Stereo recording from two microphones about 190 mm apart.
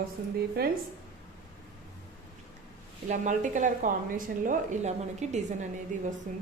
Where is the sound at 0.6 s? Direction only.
55° right (ahead or behind).